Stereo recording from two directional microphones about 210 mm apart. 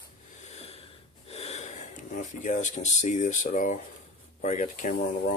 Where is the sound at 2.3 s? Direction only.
35° left (ahead or behind).